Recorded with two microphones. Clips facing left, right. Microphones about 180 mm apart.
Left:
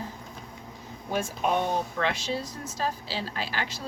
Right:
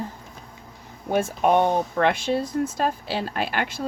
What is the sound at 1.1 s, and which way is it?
Speech, 55° right (ahead or behind).